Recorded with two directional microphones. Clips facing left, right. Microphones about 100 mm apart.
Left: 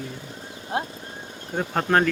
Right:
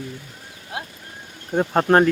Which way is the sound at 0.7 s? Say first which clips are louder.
Left 5 dB; 30° left (ahead or behind).